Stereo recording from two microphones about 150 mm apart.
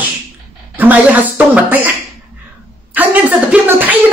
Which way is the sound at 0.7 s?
10° right (ahead or behind).